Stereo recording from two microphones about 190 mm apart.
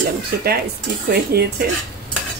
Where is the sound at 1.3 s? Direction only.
55° right (ahead or behind).